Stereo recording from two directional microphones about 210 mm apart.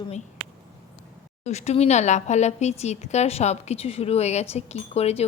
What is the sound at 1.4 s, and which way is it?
A woman's voice, 30° left (ahead or behind).